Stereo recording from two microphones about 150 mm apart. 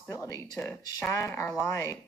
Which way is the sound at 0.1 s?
25° left (ahead or behind).